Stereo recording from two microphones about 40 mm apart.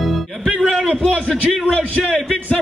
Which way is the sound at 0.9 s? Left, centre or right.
Right.